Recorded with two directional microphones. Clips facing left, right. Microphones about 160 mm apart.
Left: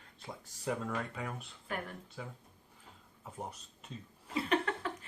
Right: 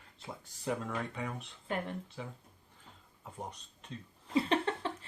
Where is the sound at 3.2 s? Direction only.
5° left (ahead or behind).